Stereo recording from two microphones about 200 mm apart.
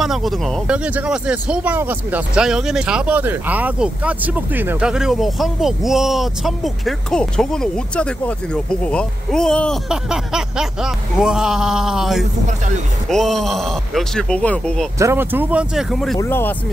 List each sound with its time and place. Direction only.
0.0 s speech: centre (ahead or behind)
12.4 s speech: 40° right (ahead or behind)
13.1 s speech: centre (ahead or behind)
15.0 s speech: 10° right (ahead or behind)
16.2 s speech: 10° left (ahead or behind)